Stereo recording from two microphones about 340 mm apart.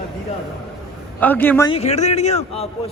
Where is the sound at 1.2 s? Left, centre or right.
Centre.